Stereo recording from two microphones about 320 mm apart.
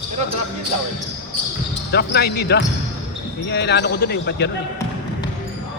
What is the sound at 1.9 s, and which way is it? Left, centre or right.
Speech, left.